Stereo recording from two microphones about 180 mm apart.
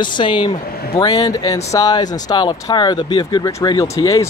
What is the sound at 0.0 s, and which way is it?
Speech, 25° left (ahead or behind).